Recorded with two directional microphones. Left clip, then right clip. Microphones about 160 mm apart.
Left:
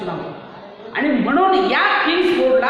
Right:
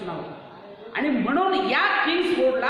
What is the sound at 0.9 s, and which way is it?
Speech, 25° right (ahead or behind).